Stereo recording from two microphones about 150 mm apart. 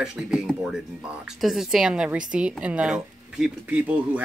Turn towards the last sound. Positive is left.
turn(degrees=-5)  # may be behind; listen again after turning